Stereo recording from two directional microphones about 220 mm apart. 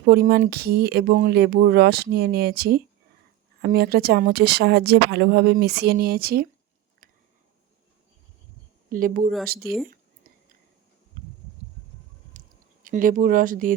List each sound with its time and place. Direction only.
0.0 s speech: 45° right (ahead or behind)
8.9 s speech: 40° right (ahead or behind)
9.6 s speech: centre (ahead or behind)
12.8 s speech: 35° right (ahead or behind)